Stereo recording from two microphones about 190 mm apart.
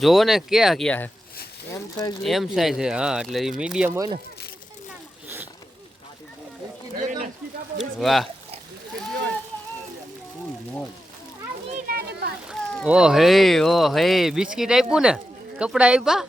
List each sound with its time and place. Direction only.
0.0 s speech: centre (ahead or behind)
1.7 s speech: 20° left (ahead or behind)
2.2 s speech: centre (ahead or behind)
3.9 s speech: 20° right (ahead or behind)
7.0 s a sound: 45° right (ahead or behind)
7.8 s speech: centre (ahead or behind)
11.9 s a sound: 55° right (ahead or behind)
12.5 s speech: centre (ahead or behind)